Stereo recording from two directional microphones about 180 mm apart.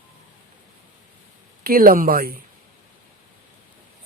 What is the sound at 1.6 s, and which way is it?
Speech, 55° right (ahead or behind).